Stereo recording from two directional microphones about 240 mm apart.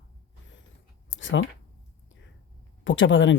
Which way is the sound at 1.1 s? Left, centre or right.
Left.